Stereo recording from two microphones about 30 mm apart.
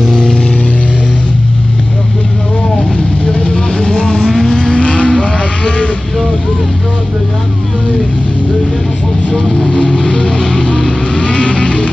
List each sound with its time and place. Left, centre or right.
0.2 s vehicle: left
3.9 s vehicle: left
4.5 s vehicle: left
9.4 s vehicle: centre
11.1 s vehicle: left